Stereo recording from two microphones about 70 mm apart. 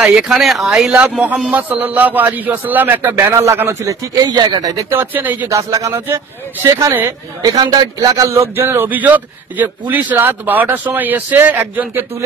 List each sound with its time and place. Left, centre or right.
0.0 s speech: centre
0.9 s a man's voice: right
3.3 s speech: right
4.2 s speech: right
4.9 s a man's voice: right
5.5 s speech: right
7.4 s a man's voice: right
8.5 s a man's voice: right